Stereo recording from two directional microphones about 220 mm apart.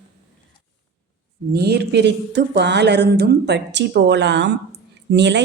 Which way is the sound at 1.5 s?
45° right (ahead or behind).